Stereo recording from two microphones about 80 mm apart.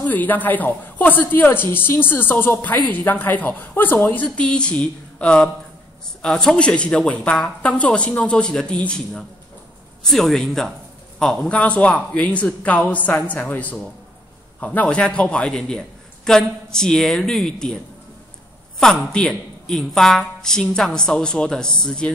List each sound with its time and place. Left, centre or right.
0.0 s a man's voice: left
2.6 s a man's voice: centre
4.4 s speech: centre
18.8 s speech: centre